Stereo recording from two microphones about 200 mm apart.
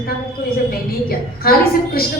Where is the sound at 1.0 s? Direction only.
50° left (ahead or behind).